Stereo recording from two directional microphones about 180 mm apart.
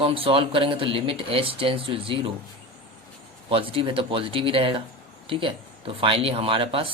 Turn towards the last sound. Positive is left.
turn(degrees=-30)  # may be behind; listen again after turning